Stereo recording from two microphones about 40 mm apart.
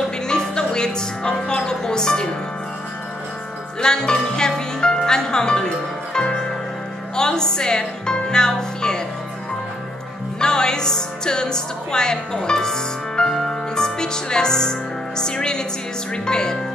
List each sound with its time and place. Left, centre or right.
0.3 s music: centre
3.8 s music: centre
10.4 s a woman's voice: centre